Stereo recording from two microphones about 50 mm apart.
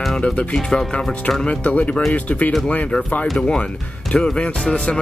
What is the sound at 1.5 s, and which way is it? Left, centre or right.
Speech, left.